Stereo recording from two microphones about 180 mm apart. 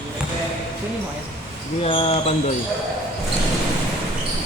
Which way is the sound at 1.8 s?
30° left (ahead or behind).